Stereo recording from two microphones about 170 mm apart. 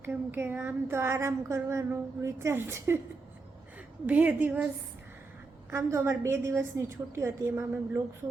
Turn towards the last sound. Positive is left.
turn(degrees=-15)  # may be behind; listen again after turning